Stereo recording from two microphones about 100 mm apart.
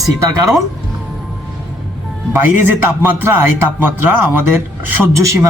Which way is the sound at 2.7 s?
20° right (ahead or behind).